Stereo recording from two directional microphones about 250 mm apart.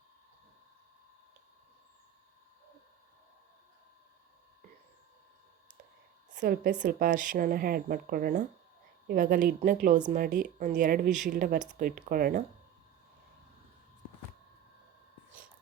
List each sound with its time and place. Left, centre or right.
6.3 s a woman's voice: right